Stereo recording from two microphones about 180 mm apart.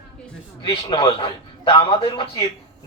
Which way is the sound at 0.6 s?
30° left (ahead or behind).